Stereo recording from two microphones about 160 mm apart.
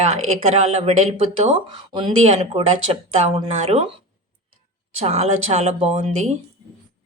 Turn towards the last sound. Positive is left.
turn(degrees=-45)  # may be behind; listen again after turning